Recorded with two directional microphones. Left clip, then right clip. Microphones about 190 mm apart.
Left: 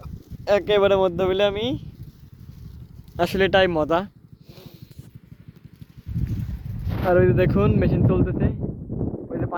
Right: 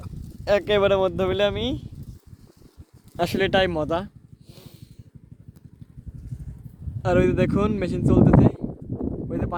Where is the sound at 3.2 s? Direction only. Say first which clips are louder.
Left 3 dB; 5° left (ahead or behind).